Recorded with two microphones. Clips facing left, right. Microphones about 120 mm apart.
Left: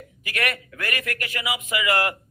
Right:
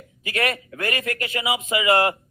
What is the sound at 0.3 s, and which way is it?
A man's voice, 25° right (ahead or behind).